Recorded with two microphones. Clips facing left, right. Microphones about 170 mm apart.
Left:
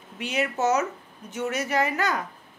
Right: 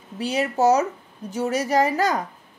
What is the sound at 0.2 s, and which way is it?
A woman's voice, 35° right (ahead or behind).